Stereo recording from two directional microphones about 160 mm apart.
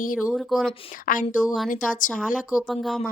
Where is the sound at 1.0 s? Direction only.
55° left (ahead or behind).